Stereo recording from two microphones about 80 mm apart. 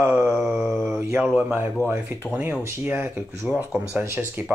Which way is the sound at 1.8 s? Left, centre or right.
Left.